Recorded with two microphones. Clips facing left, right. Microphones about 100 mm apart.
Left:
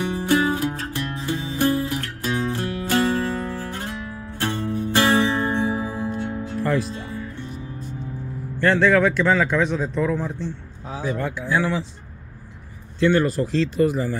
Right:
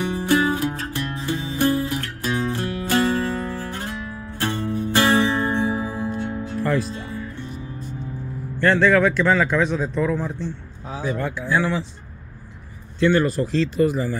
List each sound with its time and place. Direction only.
0.1 s music: 15° left (ahead or behind)
6.6 s music: 15° left (ahead or behind)
8.5 s a man's voice: 5° left (ahead or behind)
11.0 s speech: 5° left (ahead or behind)
13.2 s speech: 25° left (ahead or behind)